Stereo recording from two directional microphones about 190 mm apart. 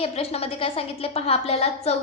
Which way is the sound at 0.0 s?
30° left (ahead or behind).